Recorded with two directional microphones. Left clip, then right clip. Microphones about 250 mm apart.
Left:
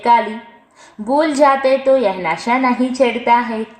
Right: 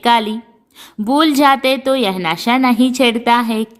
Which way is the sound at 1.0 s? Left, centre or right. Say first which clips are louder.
Right 1 dB; right.